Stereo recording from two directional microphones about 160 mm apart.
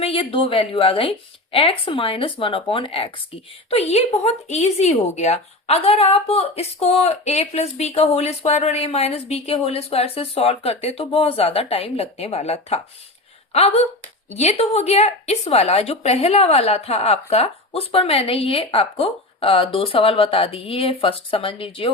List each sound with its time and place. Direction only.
0.0 s speech: 35° left (ahead or behind)